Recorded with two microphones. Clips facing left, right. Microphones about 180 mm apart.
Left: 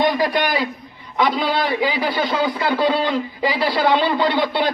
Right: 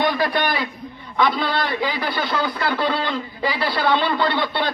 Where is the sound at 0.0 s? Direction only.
15° left (ahead or behind).